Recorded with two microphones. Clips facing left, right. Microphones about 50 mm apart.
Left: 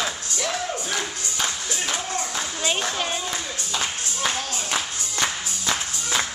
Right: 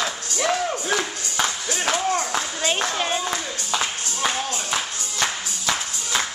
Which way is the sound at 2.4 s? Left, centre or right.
Centre.